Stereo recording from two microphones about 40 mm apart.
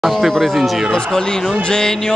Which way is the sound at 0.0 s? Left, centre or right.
Centre.